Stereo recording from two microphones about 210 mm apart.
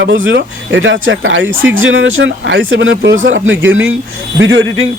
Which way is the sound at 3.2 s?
65° right (ahead or behind).